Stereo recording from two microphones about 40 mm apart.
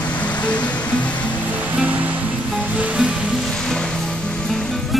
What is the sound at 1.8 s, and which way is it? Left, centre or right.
Music, right.